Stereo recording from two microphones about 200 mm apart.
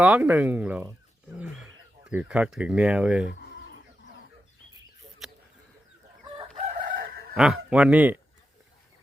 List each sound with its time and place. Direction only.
0.0 s speech: 5° right (ahead or behind)
5.2 s a sound: centre (ahead or behind)
6.7 s chicken: 40° right (ahead or behind)
7.3 s speech: 5° right (ahead or behind)